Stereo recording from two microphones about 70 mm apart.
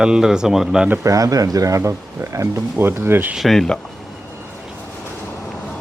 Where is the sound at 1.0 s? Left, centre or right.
Right.